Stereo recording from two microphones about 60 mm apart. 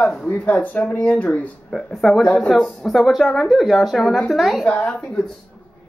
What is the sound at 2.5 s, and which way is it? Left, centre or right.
Speech, centre.